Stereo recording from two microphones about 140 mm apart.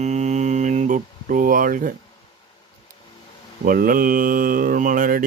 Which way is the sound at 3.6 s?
85° right.